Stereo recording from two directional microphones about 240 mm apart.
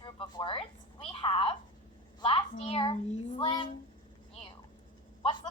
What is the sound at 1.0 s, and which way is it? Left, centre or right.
A woman's voice, left.